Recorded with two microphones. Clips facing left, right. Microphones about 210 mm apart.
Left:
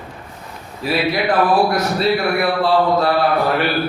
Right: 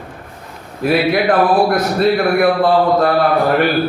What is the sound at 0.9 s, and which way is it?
A man's voice, 50° right (ahead or behind).